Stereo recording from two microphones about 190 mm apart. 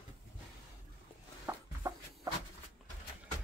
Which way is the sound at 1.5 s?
15° right (ahead or behind).